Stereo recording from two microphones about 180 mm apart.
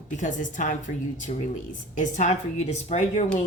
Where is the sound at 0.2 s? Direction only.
45° left (ahead or behind).